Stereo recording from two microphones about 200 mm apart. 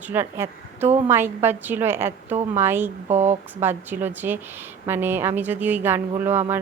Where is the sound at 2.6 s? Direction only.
10° right (ahead or behind).